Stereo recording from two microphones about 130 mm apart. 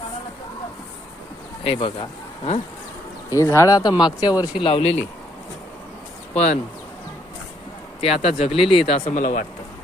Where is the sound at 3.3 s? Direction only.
25° left (ahead or behind).